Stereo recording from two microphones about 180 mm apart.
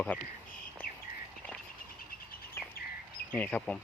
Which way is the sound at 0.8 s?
55° left (ahead or behind).